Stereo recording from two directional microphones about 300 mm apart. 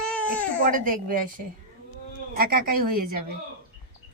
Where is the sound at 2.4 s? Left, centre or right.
Right.